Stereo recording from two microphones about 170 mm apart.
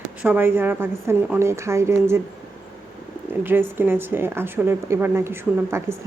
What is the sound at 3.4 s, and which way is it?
A woman's voice, 10° right (ahead or behind).